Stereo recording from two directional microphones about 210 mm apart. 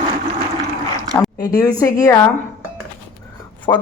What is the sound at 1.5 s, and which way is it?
Speech, 15° left (ahead or behind).